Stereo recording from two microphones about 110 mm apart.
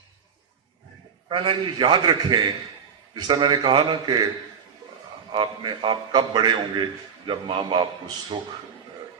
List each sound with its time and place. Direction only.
1.3 s a man's voice: 45° right (ahead or behind)
5.3 s a man's voice: 50° right (ahead or behind)